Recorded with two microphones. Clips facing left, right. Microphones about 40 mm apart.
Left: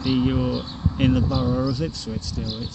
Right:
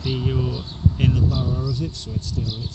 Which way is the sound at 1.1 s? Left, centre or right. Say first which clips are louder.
Left 3 dB; left.